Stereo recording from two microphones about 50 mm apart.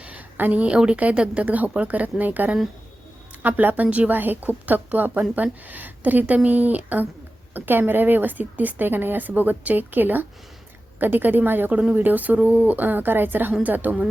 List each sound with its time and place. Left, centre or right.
0.0 s a sound: right
0.6 s a woman's voice: right
1.5 s a woman's voice: right
4.1 s a woman's voice: right
11.7 s a woman's voice: right
11.9 s a woman's voice: right